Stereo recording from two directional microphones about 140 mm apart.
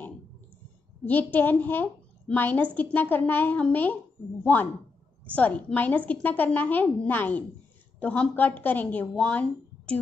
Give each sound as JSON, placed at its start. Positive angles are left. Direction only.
{"t": 1.0, "sound": "a woman's voice", "side_deg": 10}